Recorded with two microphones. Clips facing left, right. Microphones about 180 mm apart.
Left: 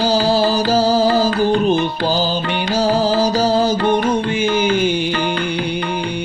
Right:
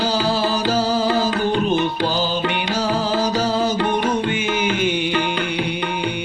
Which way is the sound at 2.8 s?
35° left (ahead or behind).